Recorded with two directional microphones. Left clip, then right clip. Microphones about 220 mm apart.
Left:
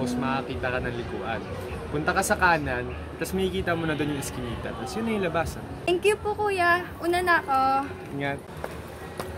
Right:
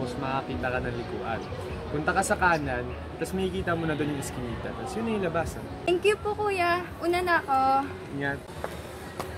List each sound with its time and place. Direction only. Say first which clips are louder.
0.0 s speech: left 2 dB; 5° right (ahead or behind)
2.0 s a woman's voice: left 2 dB; 5° right (ahead or behind)